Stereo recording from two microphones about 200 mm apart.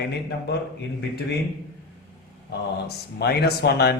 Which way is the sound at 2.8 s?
55° left (ahead or behind).